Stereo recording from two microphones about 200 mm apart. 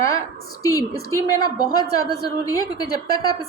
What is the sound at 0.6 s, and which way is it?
A woman's voice, 15° left (ahead or behind).